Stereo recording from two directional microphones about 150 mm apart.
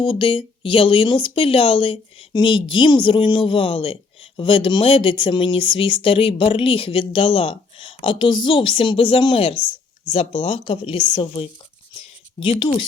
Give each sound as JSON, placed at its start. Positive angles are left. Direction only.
{"t": 0.0, "sound": "speech", "side_deg": 35}